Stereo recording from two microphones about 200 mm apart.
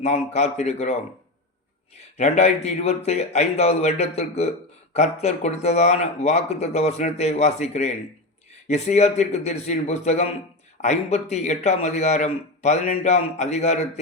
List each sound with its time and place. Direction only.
0.0 s a man's voice: 35° left (ahead or behind)
2.1 s a man's voice: 35° left (ahead or behind)